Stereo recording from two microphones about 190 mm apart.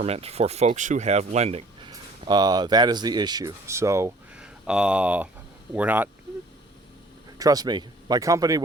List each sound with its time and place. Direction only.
0.0 s speech: 30° right (ahead or behind); by 6.1 s 10° right (ahead or behind)
7.3 s speech: 20° right (ahead or behind)